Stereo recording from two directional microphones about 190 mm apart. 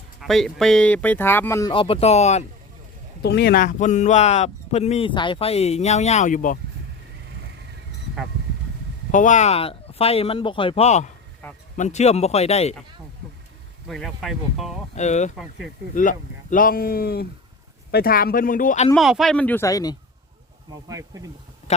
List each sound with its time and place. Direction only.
0.2 s speech: centre (ahead or behind)
1.7 s speech: 30° left (ahead or behind)
3.2 s speech: 60° left (ahead or behind); by 6.6 s 45° left (ahead or behind)
9.1 s speech: 40° left (ahead or behind)
11.4 s speech: 10° left (ahead or behind)
11.8 s speech: 35° left (ahead or behind)
13.8 s speech: centre (ahead or behind)
14.9 s speech: 40° left (ahead or behind)
15.4 s speech: 5° right (ahead or behind)
16.0 s speech: 45° left (ahead or behind)
18.9 s speech: centre (ahead or behind); by 20.0 s 20° left (ahead or behind)
20.8 s speech: 15° right (ahead or behind)
21.7 s speech: 35° left (ahead or behind)